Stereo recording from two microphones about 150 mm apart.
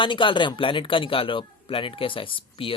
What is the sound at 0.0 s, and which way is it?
A man's voice, 35° left (ahead or behind).